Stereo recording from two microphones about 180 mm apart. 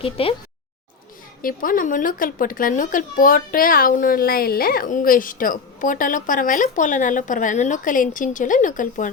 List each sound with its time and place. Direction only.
0.0 s speech: 30° left (ahead or behind)
1.4 s speech: 50° left (ahead or behind)